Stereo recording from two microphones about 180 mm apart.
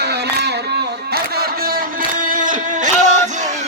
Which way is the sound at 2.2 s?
50° right (ahead or behind).